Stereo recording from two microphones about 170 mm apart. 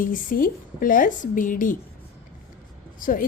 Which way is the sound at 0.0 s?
55° left (ahead or behind).